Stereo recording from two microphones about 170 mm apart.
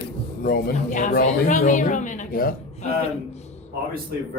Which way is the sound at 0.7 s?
50° left (ahead or behind).